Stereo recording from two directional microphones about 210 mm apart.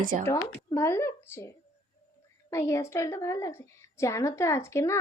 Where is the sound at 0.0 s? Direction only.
40° right (ahead or behind).